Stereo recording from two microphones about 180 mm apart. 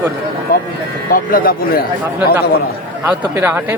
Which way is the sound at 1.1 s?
50° left (ahead or behind).